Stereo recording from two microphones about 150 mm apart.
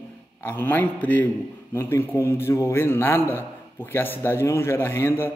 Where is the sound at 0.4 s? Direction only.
15° left (ahead or behind).